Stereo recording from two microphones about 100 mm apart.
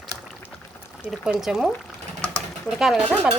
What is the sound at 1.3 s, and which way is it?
Speech, 5° right (ahead or behind).